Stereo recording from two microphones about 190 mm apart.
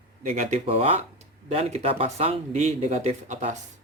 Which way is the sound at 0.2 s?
40° right (ahead or behind).